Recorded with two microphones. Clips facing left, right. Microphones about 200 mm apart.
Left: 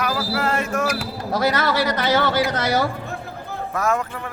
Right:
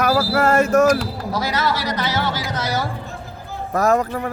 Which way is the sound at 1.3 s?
55° left (ahead or behind).